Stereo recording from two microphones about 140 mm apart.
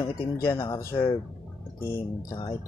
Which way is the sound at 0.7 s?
20° left (ahead or behind).